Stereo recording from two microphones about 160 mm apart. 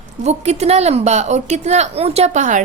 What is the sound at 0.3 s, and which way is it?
A woman's voice, 40° right (ahead or behind).